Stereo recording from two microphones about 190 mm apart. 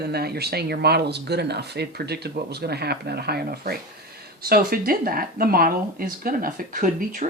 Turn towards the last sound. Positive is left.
turn(degrees=-45)  # may be behind; listen again after turning